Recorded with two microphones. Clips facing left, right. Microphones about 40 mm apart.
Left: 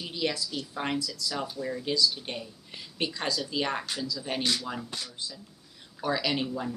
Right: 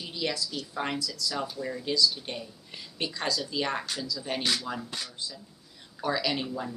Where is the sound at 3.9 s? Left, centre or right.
Left.